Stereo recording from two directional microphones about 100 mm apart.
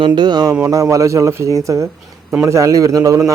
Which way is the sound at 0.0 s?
45° right (ahead or behind).